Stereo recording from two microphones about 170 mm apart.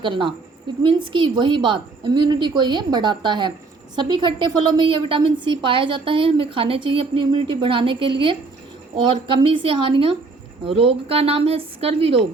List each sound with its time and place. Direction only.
0.0 s a woman's voice: 30° right (ahead or behind)